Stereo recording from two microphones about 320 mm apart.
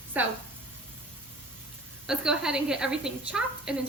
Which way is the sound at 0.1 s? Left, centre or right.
Centre.